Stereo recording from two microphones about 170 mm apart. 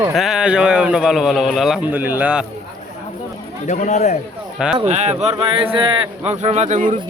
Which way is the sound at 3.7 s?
45° left (ahead or behind).